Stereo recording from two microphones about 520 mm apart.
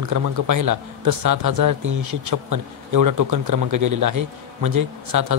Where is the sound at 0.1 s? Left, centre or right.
Right.